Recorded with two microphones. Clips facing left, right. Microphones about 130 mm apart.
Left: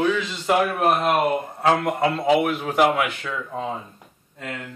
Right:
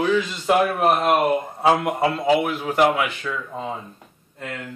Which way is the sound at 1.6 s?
10° right (ahead or behind).